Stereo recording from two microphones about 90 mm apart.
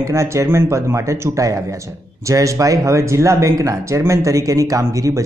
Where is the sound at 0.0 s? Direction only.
35° right (ahead or behind).